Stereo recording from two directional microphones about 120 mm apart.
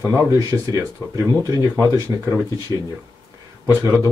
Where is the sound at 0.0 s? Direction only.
20° right (ahead or behind).